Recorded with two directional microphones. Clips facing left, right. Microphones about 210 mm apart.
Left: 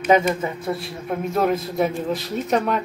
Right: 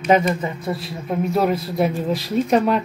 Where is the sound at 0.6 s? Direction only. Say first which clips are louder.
Right 1 dB; 5° right (ahead or behind).